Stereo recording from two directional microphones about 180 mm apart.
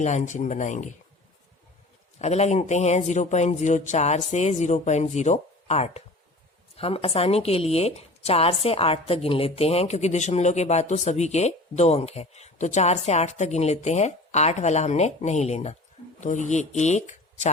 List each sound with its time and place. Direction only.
0.0 s speech: 40° left (ahead or behind)
2.1 s speech: 40° left (ahead or behind)